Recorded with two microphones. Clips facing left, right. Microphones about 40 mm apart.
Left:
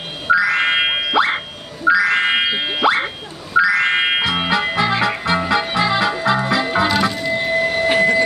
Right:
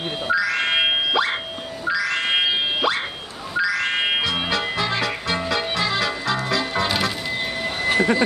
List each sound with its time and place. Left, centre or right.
0.3 s music: centre
7.0 s music: centre
7.4 s vehicle: centre